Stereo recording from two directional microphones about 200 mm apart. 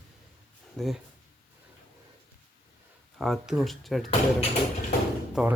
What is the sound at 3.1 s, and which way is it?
Speech, centre (ahead or behind).